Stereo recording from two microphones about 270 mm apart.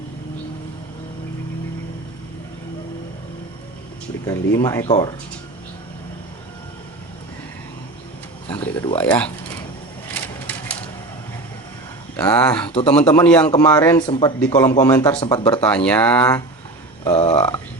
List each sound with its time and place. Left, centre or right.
4.3 s a man's voice: centre
8.4 s speech: centre
12.1 s speech: centre
12.6 s speech: left
13.2 s a man's voice: centre
15.6 s speech: centre
17.0 s speech: left